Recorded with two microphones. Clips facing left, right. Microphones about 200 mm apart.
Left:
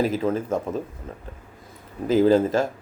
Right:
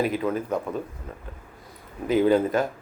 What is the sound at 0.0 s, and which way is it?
Speech, 30° left (ahead or behind).